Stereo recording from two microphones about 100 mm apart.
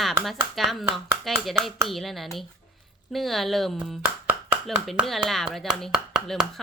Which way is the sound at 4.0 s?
15° right (ahead or behind).